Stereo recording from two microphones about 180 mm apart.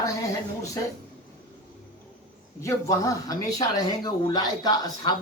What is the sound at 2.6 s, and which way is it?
Speech, 15° left (ahead or behind).